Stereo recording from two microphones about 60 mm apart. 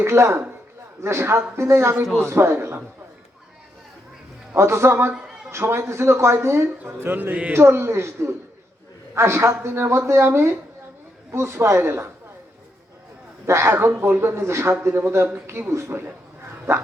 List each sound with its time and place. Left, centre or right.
0.0 s speech: right
4.5 s speech: right
13.5 s speech: right